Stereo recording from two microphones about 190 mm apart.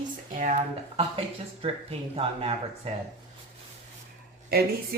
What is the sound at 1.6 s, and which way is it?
Speech, 30° right (ahead or behind).